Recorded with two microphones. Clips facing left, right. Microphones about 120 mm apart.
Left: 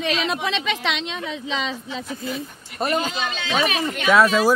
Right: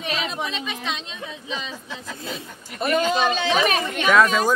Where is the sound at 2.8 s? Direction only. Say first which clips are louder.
Right 1 dB; 40° left (ahead or behind).